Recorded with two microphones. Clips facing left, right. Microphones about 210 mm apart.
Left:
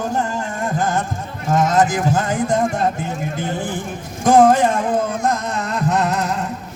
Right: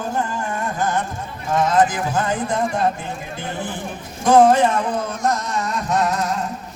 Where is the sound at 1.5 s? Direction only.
45° left (ahead or behind).